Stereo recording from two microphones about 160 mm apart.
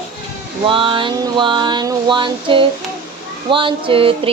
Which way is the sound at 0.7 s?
30° right (ahead or behind).